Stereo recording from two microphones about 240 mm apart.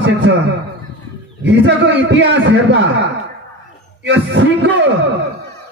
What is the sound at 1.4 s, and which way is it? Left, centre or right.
A man's voice, right.